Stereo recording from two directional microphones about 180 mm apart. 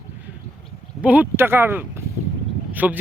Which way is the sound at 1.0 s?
10° right (ahead or behind).